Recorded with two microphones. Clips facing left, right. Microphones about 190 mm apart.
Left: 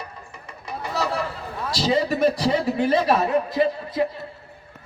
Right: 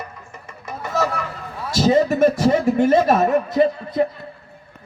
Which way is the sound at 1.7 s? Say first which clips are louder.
Right 6 dB; 45° right (ahead or behind).